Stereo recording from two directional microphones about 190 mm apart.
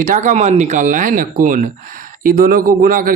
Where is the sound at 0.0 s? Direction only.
45° right (ahead or behind).